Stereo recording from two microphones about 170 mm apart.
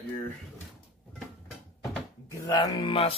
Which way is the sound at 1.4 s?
Centre (ahead or behind).